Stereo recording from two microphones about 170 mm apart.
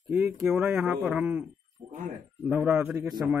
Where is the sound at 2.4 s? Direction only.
10° right (ahead or behind).